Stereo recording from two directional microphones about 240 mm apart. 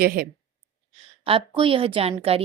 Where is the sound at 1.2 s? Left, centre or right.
Right.